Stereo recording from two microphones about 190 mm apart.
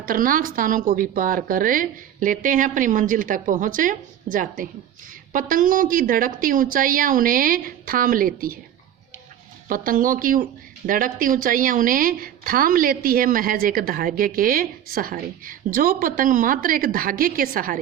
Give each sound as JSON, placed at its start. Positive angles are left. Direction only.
{"t": 0.0, "sound": "a woman's voice", "side_deg": -45}
{"t": 9.6, "sound": "a woman's voice", "side_deg": -45}